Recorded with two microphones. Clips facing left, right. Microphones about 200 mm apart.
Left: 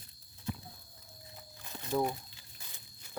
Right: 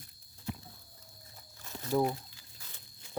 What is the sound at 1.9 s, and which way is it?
Speech, 10° right (ahead or behind).